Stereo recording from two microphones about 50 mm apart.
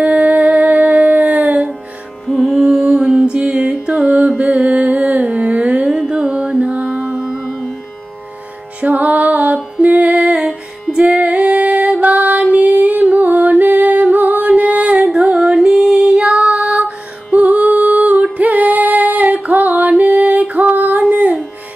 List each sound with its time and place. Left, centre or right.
0.0 s humming: right
2.4 s music: centre
5.3 s a sound: centre
5.6 s carnatic music: right
6.6 s mantra: right
7.2 s music: centre
8.8 s music: right
10.1 s music: centre
11.2 s music: right
14.6 s a sound: centre
15.0 s music: centre
16.8 s music: right